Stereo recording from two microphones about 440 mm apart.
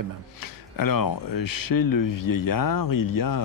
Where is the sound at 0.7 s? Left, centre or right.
Left.